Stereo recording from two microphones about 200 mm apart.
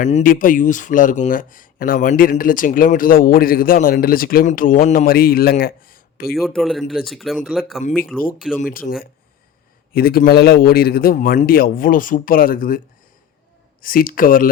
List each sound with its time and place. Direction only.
0.1 s speech: 45° left (ahead or behind)
6.3 s speech: centre (ahead or behind)
8.7 s speech: 45° left (ahead or behind)
13.8 s speech: 45° left (ahead or behind)